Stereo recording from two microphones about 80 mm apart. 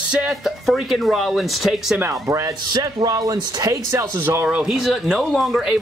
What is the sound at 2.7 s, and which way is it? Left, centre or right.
Speech, right.